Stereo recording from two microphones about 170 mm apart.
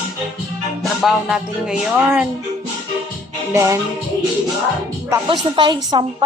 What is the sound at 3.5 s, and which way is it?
Speech, 15° right (ahead or behind).